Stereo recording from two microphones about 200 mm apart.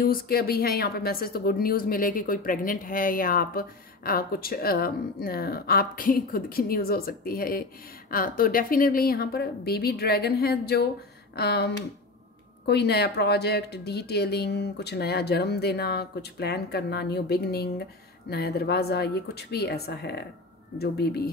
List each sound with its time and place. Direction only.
0.0 s a woman's voice: 50° left (ahead or behind)